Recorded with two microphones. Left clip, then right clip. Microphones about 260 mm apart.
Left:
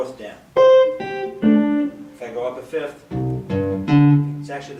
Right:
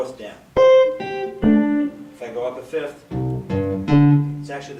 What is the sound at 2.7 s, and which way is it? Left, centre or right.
Music, centre.